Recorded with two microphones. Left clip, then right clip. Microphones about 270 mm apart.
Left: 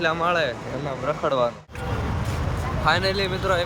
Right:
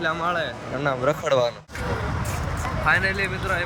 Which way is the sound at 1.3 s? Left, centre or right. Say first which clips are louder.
Even; right.